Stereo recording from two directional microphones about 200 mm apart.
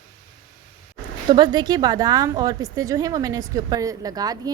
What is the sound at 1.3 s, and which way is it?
A woman's voice, 20° right (ahead or behind).